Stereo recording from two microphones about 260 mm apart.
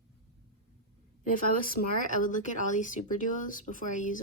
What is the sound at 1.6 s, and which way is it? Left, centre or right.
Speech, left.